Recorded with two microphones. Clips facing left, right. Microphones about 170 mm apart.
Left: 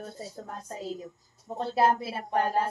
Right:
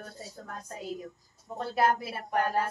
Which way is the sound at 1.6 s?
30° left (ahead or behind).